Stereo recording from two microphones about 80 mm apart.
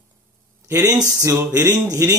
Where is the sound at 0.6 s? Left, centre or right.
Right.